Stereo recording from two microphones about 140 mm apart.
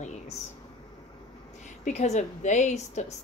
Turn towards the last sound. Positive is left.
turn(degrees=55)  # may be behind; listen again after turning